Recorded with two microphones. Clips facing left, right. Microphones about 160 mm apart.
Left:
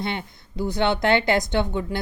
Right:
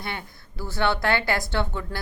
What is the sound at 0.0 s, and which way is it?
A woman's voice, 20° left (ahead or behind).